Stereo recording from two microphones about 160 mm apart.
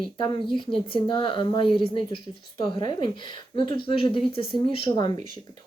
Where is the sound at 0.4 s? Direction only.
30° left (ahead or behind).